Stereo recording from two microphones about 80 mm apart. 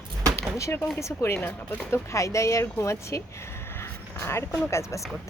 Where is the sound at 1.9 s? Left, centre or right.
Left.